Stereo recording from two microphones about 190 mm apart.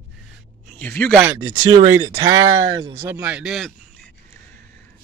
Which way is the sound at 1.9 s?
20° right (ahead or behind).